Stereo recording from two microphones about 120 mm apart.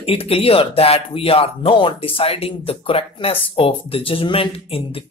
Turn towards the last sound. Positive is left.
turn(degrees=50)  # may be behind; listen again after turning